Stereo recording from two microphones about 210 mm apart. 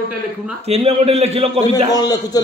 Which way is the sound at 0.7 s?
30° right (ahead or behind).